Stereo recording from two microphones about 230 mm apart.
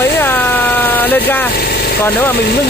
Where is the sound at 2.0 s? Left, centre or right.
Centre.